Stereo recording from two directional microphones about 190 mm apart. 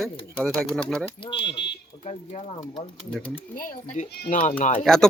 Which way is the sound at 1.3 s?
65° left (ahead or behind).